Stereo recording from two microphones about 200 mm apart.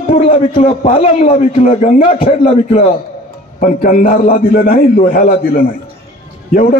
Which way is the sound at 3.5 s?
45° left (ahead or behind).